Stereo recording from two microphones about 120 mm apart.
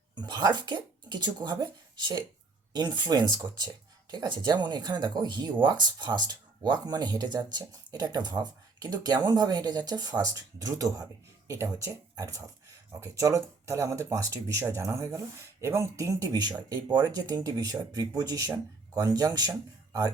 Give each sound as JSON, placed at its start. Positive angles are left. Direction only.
{"t": 0.2, "sound": "speech", "side_deg": -35}